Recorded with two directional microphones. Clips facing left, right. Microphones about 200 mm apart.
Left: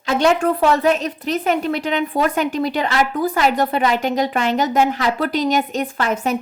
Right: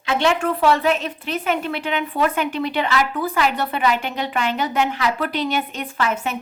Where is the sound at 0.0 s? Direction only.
40° left (ahead or behind).